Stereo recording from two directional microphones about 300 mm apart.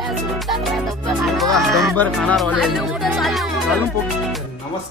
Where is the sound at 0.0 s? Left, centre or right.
Centre.